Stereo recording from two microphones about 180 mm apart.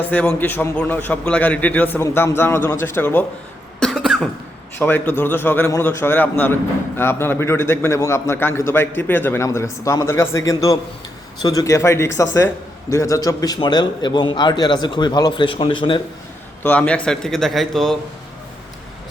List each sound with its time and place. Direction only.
0.1 s a man's voice: 10° left (ahead or behind)
3.8 s cough: centre (ahead or behind)
4.8 s a man's voice: 10° left (ahead or behind); by 16.0 s 25° left (ahead or behind)
16.6 s speech: 5° left (ahead or behind)